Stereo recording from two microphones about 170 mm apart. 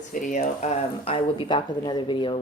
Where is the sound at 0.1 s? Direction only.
50° left (ahead or behind).